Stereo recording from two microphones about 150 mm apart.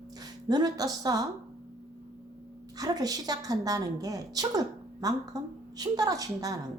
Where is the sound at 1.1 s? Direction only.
25° right (ahead or behind).